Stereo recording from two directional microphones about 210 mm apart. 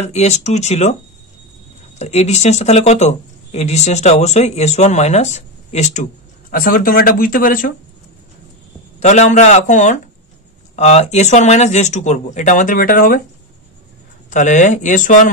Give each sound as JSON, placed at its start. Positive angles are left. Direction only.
{"t": 0.0, "sound": "speech", "side_deg": 30}
{"t": 2.0, "sound": "speech", "side_deg": 30}
{"t": 9.0, "sound": "speech", "side_deg": 35}
{"t": 14.3, "sound": "speech", "side_deg": 35}